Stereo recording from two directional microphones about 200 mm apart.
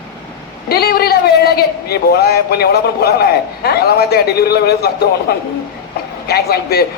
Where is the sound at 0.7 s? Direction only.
50° left (ahead or behind).